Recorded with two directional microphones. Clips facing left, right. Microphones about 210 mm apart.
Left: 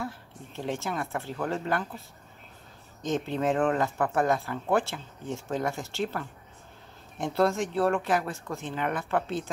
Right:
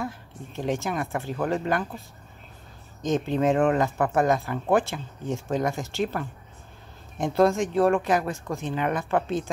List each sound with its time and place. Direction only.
0.6 s speech: 15° right (ahead or behind)
3.1 s speech: 20° right (ahead or behind)
7.3 s speech: 15° right (ahead or behind)